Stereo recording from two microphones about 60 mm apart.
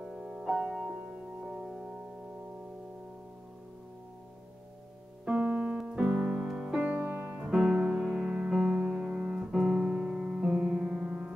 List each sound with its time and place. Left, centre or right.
0.0 s music: centre
5.2 s keyboard: right
7.5 s music: centre
9.8 s piano: centre